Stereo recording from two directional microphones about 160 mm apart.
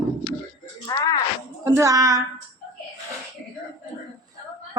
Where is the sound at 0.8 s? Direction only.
20° left (ahead or behind).